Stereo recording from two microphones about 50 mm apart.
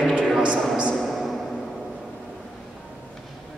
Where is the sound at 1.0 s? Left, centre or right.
Centre.